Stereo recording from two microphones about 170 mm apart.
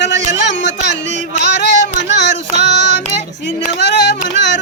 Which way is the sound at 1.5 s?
90° left.